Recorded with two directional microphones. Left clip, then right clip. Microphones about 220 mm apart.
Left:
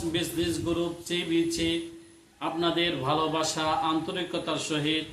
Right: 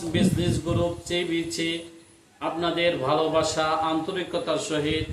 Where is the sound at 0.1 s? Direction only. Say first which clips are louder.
Right 5 dB; 15° left (ahead or behind).